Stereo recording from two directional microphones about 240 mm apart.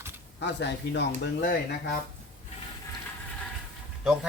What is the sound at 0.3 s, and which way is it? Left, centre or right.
Speech, left.